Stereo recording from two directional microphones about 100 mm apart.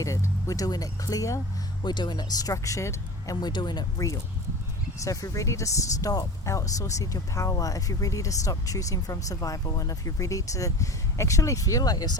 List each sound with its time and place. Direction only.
0.0 s speech: 30° left (ahead or behind)
1.8 s speech: 45° left (ahead or behind); by 3.3 s 30° left (ahead or behind)
3.4 s speech: 50° left (ahead or behind)